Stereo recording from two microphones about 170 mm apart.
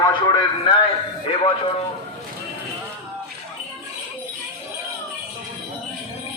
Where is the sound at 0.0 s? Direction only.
25° left (ahead or behind).